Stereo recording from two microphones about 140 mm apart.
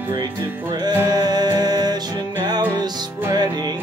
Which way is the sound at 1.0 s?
30° right (ahead or behind).